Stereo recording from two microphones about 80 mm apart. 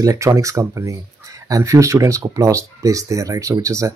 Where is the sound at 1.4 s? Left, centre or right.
Right.